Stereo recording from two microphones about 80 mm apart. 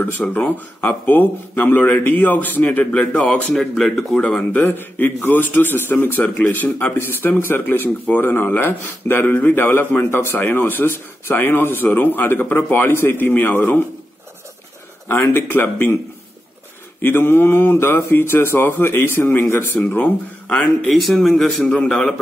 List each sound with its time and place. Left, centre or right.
0.3 s a man's voice: left
4.6 s a man's voice: left
15.3 s a man's voice: left
17.0 s a man's voice: left
20.4 s speech: centre
20.9 s speech: centre